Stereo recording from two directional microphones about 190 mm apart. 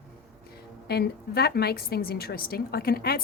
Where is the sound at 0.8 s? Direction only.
55° left (ahead or behind).